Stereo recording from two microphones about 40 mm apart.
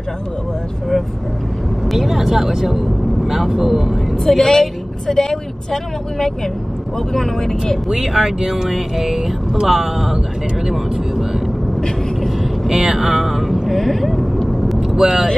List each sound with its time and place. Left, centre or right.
1.9 s speech: centre
4.2 s a woman's voice: centre
7.9 s speech: centre
12.6 s speech: centre
14.9 s speech: centre